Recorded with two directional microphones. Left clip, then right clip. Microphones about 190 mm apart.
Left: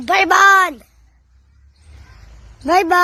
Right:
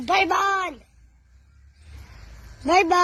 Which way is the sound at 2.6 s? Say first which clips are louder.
Left 5 dB; 25° left (ahead or behind).